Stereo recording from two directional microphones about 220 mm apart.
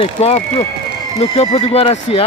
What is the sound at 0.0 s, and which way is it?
Speech, 30° left (ahead or behind).